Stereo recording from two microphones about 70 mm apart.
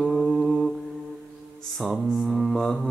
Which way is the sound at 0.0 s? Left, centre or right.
Centre.